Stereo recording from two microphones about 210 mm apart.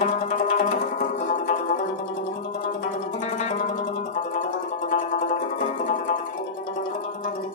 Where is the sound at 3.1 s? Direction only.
35° left (ahead or behind).